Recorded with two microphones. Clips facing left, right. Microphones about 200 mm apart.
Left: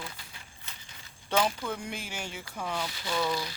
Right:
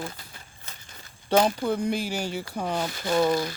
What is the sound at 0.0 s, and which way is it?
Walk, 45° right (ahead or behind).